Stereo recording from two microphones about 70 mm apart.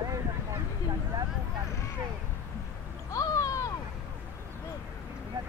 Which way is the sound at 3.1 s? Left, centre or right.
Left.